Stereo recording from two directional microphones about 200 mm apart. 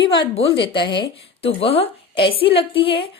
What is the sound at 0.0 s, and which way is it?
A woman's voice, 25° left (ahead or behind).